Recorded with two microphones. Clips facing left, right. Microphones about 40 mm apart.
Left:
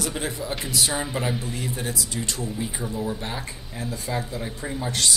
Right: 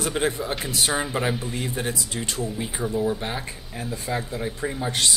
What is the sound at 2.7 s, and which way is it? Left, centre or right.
Speech, centre.